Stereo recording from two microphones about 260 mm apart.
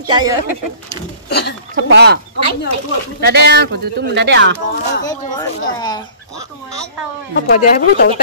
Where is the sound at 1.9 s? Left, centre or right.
Right.